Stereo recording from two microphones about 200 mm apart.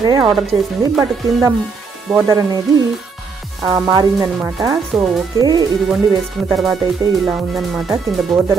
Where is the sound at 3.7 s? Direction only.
15° right (ahead or behind).